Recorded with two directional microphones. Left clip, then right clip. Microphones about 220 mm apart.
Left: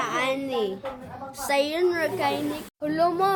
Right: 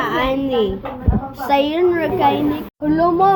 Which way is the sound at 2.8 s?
25° left (ahead or behind).